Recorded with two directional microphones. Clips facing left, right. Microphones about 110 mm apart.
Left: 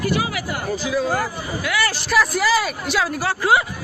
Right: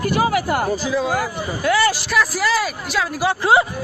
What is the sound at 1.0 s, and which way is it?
Speech, 10° right (ahead or behind).